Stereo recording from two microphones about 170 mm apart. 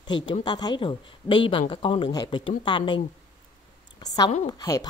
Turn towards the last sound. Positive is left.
turn(degrees=20)  # may be behind; listen again after turning